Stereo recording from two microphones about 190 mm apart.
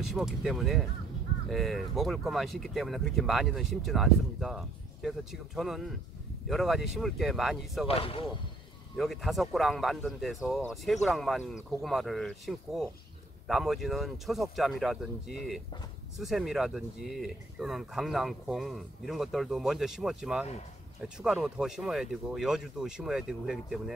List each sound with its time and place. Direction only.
0.0 s speech: centre (ahead or behind)
7.9 s speech: 30° left (ahead or behind)
8.9 s speech: centre (ahead or behind)